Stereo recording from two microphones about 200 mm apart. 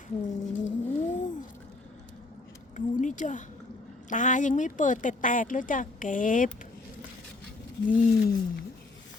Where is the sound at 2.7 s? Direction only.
40° left (ahead or behind).